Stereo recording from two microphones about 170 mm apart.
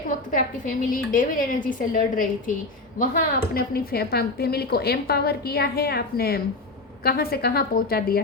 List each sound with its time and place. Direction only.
0.3 s a woman's voice: 50° left (ahead or behind)